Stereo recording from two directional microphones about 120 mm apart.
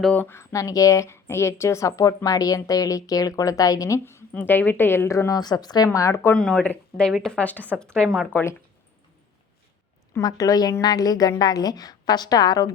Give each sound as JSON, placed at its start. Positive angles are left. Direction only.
{"t": 0.0, "sound": "a woman's voice", "side_deg": 15}
{"t": 6.3, "sound": "speech", "side_deg": 10}
{"t": 8.3, "sound": "speech", "side_deg": 15}
{"t": 10.2, "sound": "a woman's voice", "side_deg": 30}